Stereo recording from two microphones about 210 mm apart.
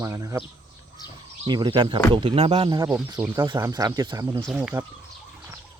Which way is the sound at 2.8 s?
5° right (ahead or behind).